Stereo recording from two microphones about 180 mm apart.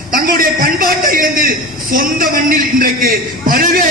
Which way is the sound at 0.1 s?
50° right (ahead or behind).